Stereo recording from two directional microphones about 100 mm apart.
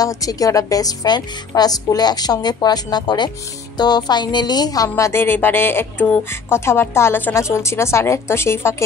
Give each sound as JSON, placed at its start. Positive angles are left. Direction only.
{"t": 0.0, "sound": "a woman's voice", "side_deg": 35}
{"t": 4.8, "sound": "speech", "side_deg": 30}